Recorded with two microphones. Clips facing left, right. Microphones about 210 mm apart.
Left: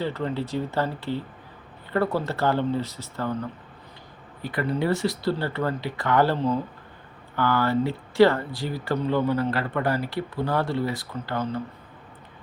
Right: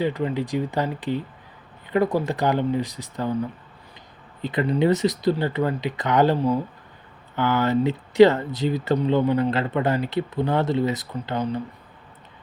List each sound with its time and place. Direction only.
0.0 s speech: 15° right (ahead or behind)
4.4 s speech: 20° right (ahead or behind)